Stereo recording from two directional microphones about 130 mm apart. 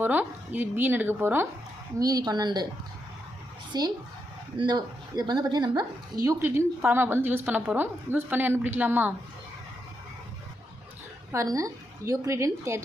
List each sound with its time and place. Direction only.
0.0 s a woman's voice: 15° right (ahead or behind)
2.0 s speech: 30° right (ahead or behind)
3.7 s a woman's voice: 30° right (ahead or behind); by 9.1 s 15° right (ahead or behind)
11.3 s a woman's voice: 25° right (ahead or behind)